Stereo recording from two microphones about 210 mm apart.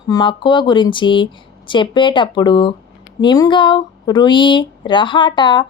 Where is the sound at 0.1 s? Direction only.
20° left (ahead or behind).